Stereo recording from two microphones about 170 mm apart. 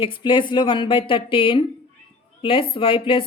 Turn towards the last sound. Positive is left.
turn(degrees=30)  # may be behind; listen again after turning